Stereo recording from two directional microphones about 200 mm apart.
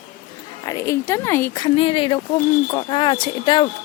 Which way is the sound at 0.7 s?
15° left (ahead or behind).